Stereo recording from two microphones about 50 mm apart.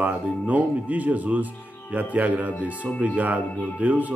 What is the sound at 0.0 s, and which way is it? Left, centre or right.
Speech, right.